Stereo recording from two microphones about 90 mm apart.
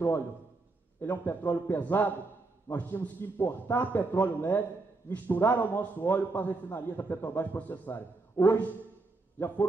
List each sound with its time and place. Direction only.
1.0 s a man's voice: 25° left (ahead or behind)